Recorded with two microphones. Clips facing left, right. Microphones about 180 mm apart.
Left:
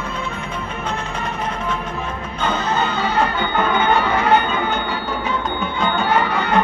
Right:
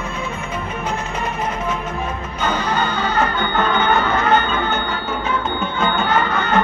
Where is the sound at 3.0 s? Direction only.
10° left (ahead or behind).